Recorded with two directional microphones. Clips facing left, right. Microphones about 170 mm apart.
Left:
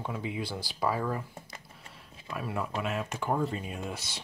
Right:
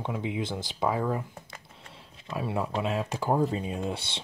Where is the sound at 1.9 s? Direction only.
25° right (ahead or behind).